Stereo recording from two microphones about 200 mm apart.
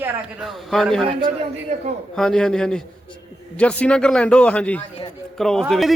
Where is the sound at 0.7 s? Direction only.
Centre (ahead or behind).